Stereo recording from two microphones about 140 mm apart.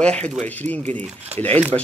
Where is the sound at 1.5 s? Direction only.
45° right (ahead or behind).